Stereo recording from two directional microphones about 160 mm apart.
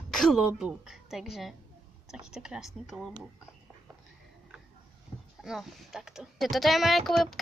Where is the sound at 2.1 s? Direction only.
5° right (ahead or behind).